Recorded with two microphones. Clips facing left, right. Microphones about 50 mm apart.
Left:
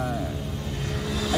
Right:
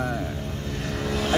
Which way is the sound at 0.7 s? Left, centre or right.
Right.